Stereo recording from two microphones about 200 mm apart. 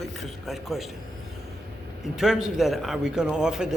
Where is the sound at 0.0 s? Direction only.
Centre (ahead or behind).